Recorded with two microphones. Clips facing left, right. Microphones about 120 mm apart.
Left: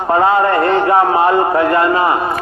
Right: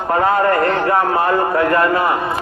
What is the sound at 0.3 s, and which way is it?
A man's voice, 25° left (ahead or behind).